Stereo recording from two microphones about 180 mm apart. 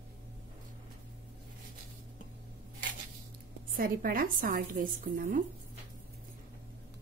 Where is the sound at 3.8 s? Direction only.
50° right (ahead or behind).